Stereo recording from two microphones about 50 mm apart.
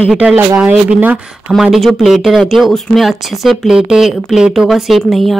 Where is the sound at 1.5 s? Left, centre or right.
Centre.